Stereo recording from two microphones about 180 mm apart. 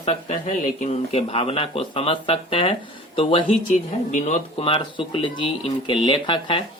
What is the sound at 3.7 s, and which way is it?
Speech, 40° left (ahead or behind).